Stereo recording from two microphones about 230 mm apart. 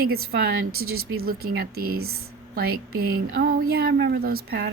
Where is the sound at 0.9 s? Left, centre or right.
Right.